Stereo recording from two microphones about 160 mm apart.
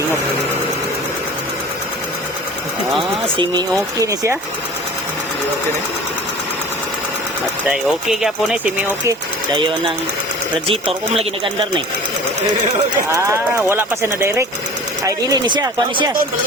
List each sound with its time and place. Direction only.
3.0 s speech: 30° right (ahead or behind)
4.0 s speech: 20° right (ahead or behind)
7.7 s speech: centre (ahead or behind)
10.7 s speech: 40° right (ahead or behind)
13.1 s speech: 20° right (ahead or behind)
15.0 s speech: 25° right (ahead or behind)